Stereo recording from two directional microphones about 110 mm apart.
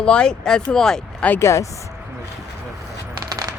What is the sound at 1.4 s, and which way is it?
Speech, 25° left (ahead or behind).